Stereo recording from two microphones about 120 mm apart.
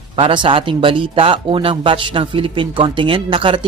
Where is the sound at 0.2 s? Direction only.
45° right (ahead or behind).